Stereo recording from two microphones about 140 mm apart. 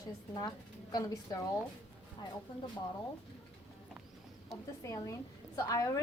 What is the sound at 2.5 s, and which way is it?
Speech, 30° left (ahead or behind).